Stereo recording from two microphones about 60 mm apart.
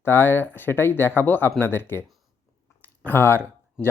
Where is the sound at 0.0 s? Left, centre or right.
Left.